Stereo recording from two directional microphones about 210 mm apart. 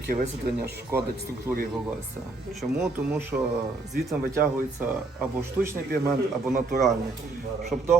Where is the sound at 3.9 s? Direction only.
5° right (ahead or behind).